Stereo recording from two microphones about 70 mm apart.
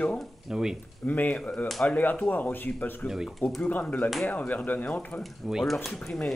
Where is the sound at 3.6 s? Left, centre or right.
Left.